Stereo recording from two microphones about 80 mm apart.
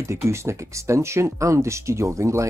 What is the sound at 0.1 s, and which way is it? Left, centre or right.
Speech, right.